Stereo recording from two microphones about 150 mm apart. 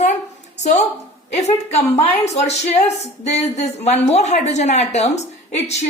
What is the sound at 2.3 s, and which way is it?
Speech, 45° left (ahead or behind).